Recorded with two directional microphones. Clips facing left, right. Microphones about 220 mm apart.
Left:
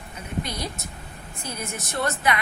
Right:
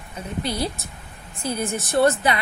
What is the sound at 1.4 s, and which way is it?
A woman's voice, 30° right (ahead or behind).